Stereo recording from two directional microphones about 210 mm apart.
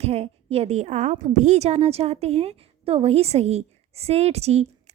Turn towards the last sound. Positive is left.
turn(degrees=-30)  # may be behind; listen again after turning